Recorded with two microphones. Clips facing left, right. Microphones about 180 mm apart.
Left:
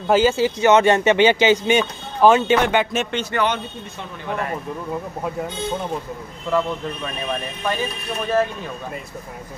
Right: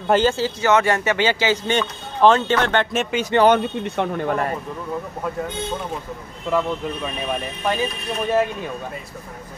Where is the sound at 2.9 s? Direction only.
5° right (ahead or behind).